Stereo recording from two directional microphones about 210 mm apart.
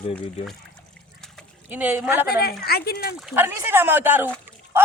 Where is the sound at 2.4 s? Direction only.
45° left (ahead or behind).